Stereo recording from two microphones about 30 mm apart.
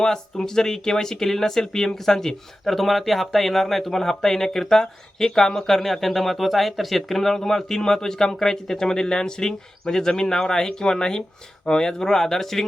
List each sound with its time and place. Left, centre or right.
0.0 s speech: centre
2.7 s speech: centre